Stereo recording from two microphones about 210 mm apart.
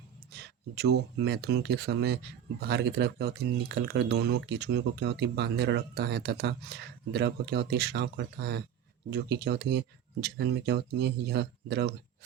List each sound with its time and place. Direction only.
1.2 s speech: 50° right (ahead or behind)